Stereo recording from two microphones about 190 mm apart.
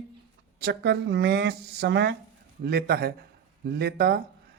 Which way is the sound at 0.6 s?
60° right (ahead or behind).